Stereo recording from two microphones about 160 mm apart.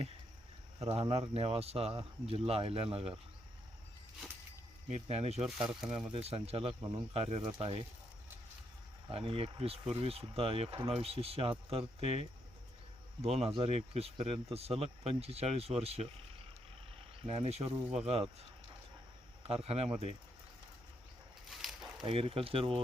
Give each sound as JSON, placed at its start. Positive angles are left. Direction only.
{"t": 0.8, "sound": "speech", "side_deg": -40}
{"t": 4.9, "sound": "speech", "side_deg": -45}
{"t": 9.0, "sound": "speech", "side_deg": -35}
{"t": 13.2, "sound": "speech", "side_deg": -40}
{"t": 17.2, "sound": "speech", "side_deg": -40}
{"t": 21.5, "sound": "a sound", "side_deg": 0}
{"t": 22.0, "sound": "speech", "side_deg": -35}